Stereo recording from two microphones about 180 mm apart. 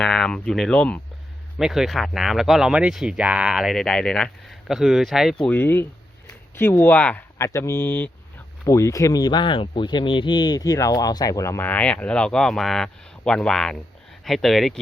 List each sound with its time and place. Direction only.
0.0 s speech: centre (ahead or behind)